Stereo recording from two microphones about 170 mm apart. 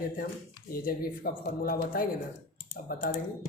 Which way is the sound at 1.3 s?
60° left (ahead or behind).